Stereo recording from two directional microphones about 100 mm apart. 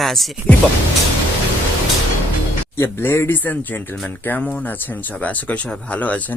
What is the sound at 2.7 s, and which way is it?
Speech, 25° left (ahead or behind).